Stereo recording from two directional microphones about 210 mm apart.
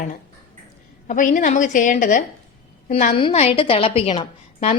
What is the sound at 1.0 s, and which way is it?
A woman's voice, 40° left (ahead or behind).